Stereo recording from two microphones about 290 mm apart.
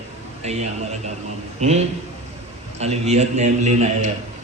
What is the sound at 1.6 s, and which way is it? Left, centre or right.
A man's voice, right.